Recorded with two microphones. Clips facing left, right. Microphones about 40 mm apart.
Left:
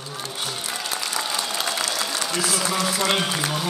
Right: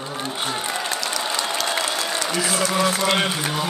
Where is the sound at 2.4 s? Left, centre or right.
Right.